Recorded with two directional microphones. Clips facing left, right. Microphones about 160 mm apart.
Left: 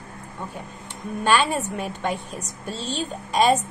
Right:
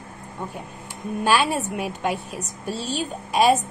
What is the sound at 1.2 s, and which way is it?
A woman's voice, 10° right (ahead or behind).